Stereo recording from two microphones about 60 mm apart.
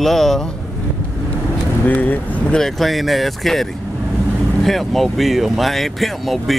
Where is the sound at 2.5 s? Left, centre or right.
Centre.